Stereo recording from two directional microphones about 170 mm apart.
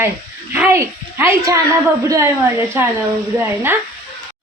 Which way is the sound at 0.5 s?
15° right (ahead or behind).